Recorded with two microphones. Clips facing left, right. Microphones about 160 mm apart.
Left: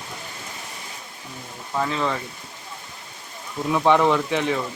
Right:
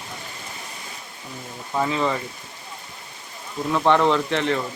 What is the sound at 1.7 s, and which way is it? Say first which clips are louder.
Speech: right 2 dB; 5° right (ahead or behind).